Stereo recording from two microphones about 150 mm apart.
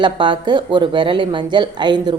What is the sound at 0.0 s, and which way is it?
A woman's voice, 30° right (ahead or behind).